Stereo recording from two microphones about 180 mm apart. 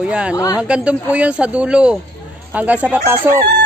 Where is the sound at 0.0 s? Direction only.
5° right (ahead or behind).